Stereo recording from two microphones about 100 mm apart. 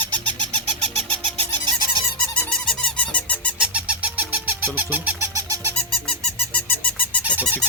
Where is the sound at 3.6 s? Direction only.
10° right (ahead or behind).